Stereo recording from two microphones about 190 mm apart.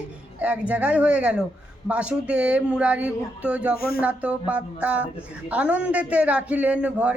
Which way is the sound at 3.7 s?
50° left (ahead or behind).